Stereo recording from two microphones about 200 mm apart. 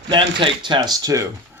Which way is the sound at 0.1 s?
25° right (ahead or behind).